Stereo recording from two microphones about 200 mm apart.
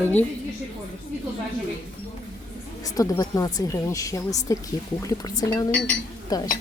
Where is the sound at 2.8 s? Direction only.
20° left (ahead or behind).